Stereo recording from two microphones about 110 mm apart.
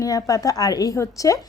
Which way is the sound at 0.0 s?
30° left (ahead or behind).